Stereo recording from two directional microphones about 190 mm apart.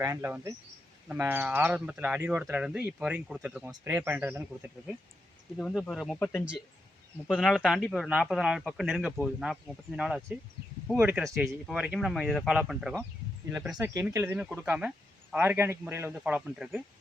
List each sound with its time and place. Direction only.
0.0 s speech: 15° right (ahead or behind)
5.5 s speech: 5° left (ahead or behind)